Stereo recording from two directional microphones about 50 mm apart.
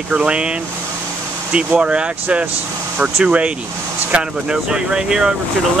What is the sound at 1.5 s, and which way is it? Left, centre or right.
Speech, right.